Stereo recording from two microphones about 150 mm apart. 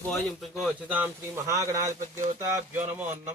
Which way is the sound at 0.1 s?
Centre (ahead or behind).